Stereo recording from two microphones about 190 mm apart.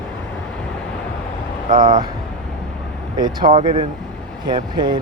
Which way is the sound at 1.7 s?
45° right (ahead or behind).